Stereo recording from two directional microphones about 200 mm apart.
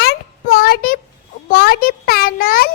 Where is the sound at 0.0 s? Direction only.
50° left (ahead or behind).